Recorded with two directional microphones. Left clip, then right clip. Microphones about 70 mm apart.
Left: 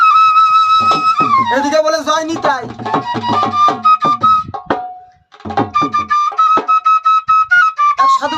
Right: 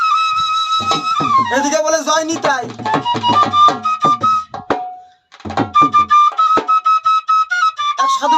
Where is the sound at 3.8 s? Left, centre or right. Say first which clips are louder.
Left 4 dB; left.